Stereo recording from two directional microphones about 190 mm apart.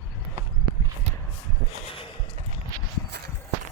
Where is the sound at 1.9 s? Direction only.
25° left (ahead or behind).